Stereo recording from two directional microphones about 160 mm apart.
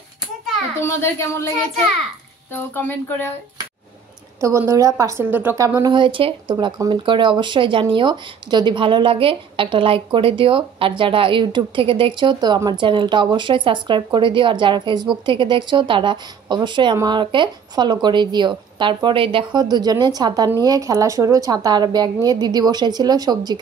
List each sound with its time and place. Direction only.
0.8 s speech: 15° left (ahead or behind)
2.5 s speech: 15° left (ahead or behind)
4.4 s a woman's voice: 20° right (ahead or behind)